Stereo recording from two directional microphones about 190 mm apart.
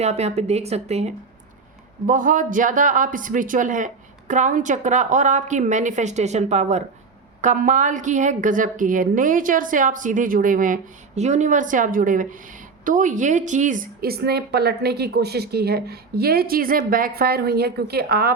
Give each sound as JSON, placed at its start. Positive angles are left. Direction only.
{"t": 0.0, "sound": "a woman's voice", "side_deg": -35}